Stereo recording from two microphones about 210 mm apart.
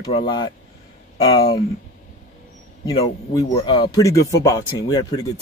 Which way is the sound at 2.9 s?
20° left (ahead or behind).